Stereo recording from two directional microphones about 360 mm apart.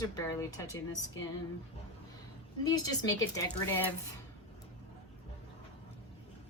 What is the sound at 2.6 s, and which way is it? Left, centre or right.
Speech, centre.